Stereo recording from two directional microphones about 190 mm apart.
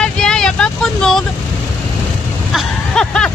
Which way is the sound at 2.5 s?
Centre (ahead or behind).